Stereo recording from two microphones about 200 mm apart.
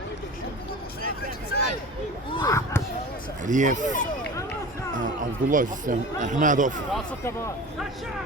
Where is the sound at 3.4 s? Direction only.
40° right (ahead or behind).